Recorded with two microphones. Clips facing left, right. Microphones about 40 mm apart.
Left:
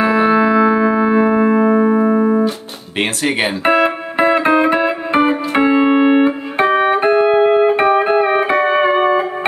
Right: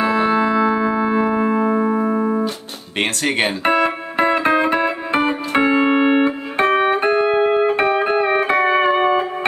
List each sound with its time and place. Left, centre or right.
0.0 s music: centre
3.0 s music: centre